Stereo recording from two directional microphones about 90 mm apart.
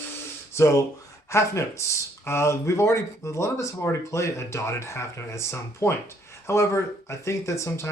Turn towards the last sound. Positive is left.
turn(degrees=35)  # may be behind; listen again after turning